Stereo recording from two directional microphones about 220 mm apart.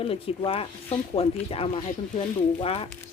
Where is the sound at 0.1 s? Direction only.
25° left (ahead or behind).